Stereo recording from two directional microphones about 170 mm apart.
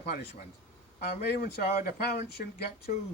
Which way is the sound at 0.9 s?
70° left (ahead or behind).